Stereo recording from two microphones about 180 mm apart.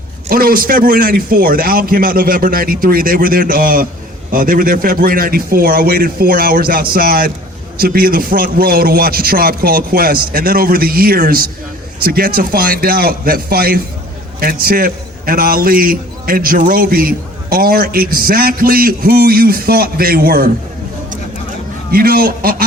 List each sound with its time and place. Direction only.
0.3 s a man's voice: 55° right (ahead or behind)
21.9 s a man's voice: 55° right (ahead or behind)